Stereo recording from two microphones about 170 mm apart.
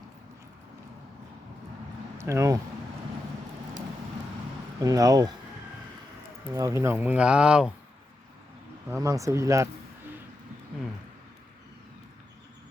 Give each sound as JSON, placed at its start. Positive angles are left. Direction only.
{"t": 2.1, "sound": "speech", "side_deg": -15}
{"t": 4.8, "sound": "speech", "side_deg": -20}
{"t": 6.5, "sound": "speech", "side_deg": -15}
{"t": 8.9, "sound": "speech", "side_deg": -20}